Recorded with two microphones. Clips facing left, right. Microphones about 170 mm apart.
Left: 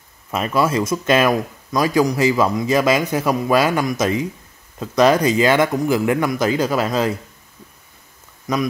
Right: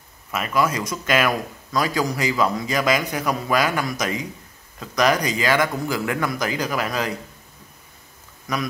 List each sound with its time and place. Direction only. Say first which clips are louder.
0.3 s speech: left 3 dB; 30° left (ahead or behind)